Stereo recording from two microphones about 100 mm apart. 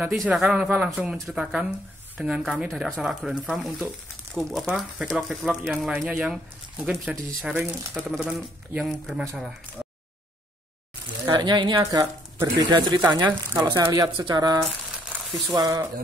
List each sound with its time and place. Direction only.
0.3 s speech: 10° right (ahead or behind)
0.8 s speech: centre (ahead or behind)
7.5 s speech: 25° right (ahead or behind)
8.2 s speech: 10° right (ahead or behind)
9.8 s a sound: 10° right (ahead or behind)
11.2 s speech: 45° right (ahead or behind)
11.8 s speech: 35° right (ahead or behind)
13.2 s speech: 20° right (ahead or behind)
13.6 s speech: 50° right (ahead or behind)